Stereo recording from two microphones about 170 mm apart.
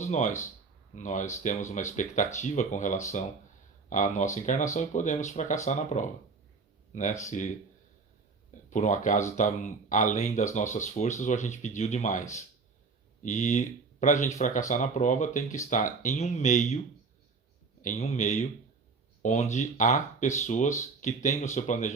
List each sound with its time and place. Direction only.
0.1 s speech: 45° left (ahead or behind)
8.7 s speech: 45° left (ahead or behind)
13.2 s speech: 45° left (ahead or behind)
17.8 s speech: 45° left (ahead or behind)